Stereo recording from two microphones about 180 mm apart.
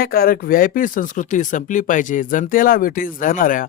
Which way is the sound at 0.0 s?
55° left (ahead or behind).